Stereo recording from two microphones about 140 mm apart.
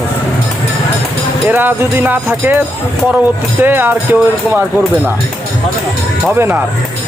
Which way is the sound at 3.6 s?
15° right (ahead or behind).